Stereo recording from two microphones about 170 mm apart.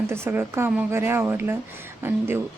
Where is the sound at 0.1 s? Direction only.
15° right (ahead or behind).